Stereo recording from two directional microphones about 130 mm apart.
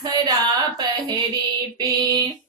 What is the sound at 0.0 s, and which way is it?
Carnatic music, 30° right (ahead or behind).